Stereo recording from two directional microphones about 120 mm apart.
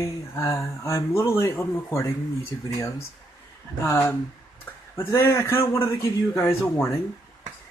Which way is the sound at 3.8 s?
25° left (ahead or behind).